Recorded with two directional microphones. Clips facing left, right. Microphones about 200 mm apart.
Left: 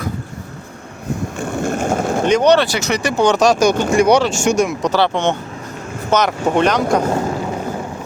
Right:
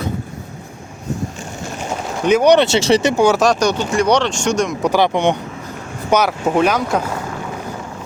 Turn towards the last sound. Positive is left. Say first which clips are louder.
# left 1 dB
turn(degrees=-5)  # may be behind; listen again after turning